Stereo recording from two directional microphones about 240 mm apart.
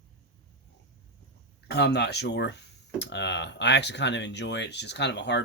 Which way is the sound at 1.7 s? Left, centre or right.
Left.